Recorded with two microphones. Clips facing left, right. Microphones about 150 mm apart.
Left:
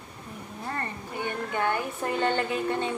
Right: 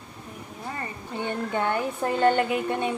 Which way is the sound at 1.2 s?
20° right (ahead or behind).